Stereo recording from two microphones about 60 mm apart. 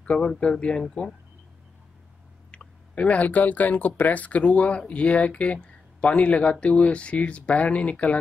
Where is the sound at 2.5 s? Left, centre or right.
Left.